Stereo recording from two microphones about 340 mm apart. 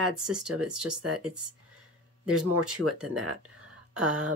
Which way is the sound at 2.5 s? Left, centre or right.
Right.